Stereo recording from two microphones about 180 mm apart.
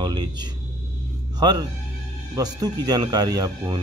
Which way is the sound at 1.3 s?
20° right (ahead or behind).